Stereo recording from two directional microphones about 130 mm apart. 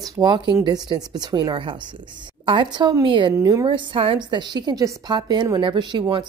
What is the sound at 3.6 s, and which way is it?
A woman's voice, 40° right (ahead or behind).